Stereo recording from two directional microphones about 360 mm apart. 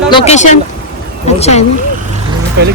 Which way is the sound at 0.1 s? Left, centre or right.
Centre.